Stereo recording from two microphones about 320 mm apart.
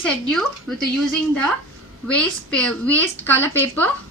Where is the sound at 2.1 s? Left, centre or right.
Centre.